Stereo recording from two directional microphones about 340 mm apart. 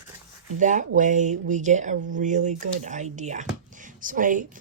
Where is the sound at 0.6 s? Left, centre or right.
Right.